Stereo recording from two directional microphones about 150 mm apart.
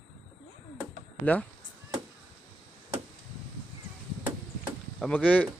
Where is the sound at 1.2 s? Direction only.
10° left (ahead or behind).